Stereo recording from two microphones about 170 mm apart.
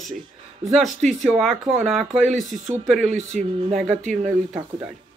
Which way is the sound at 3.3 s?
50° right (ahead or behind).